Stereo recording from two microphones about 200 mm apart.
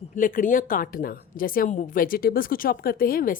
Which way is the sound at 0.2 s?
40° left (ahead or behind).